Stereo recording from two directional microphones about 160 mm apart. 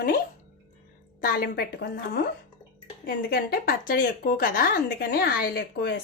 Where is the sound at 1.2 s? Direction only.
70° left (ahead or behind).